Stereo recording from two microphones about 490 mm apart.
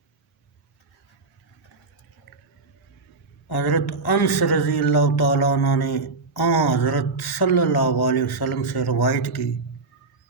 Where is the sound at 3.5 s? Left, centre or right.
Left.